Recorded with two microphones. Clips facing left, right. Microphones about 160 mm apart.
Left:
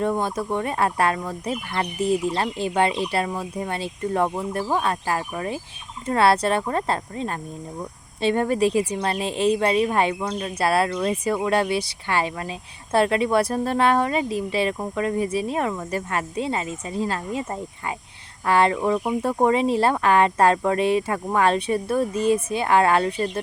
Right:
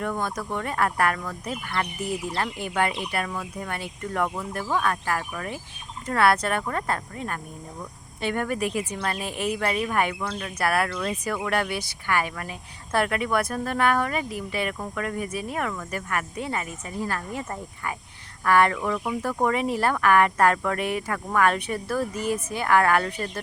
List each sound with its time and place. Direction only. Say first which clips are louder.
0.0 s a woman's voice: left 5 dB; 25° left (ahead or behind)